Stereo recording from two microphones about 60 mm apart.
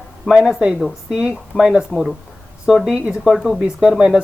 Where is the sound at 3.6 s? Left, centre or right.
Centre.